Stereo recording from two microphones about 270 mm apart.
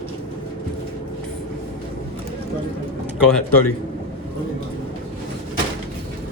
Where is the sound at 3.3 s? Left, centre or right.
Centre.